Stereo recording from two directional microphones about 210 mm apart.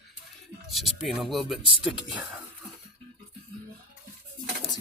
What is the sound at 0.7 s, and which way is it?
Speech, centre (ahead or behind).